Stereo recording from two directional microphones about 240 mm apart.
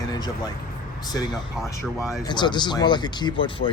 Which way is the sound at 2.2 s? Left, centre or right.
Centre.